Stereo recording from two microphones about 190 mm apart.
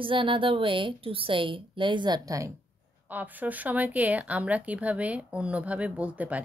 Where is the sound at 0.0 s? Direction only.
25° right (ahead or behind).